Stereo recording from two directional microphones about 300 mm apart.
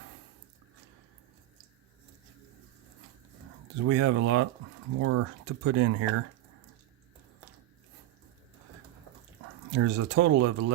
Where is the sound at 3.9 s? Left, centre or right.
Right.